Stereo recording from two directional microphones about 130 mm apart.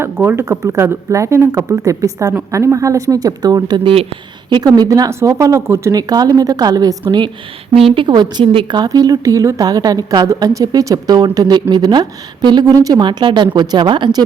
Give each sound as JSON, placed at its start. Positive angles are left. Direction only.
{"t": 0.0, "sound": "a woman's voice", "side_deg": -20}